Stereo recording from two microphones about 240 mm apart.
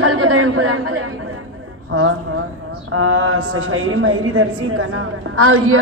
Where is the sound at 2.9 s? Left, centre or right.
Right.